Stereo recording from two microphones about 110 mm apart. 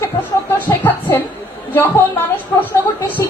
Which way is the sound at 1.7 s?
20° left (ahead or behind).